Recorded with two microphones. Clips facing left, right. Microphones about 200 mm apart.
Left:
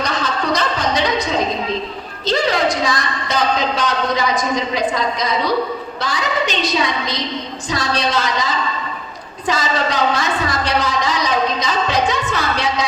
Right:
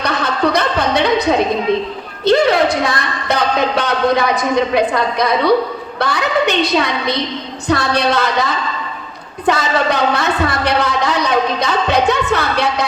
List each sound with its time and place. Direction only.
0.0 s music: 60° right (ahead or behind)
2.2 s a woman's voice: 60° right (ahead or behind)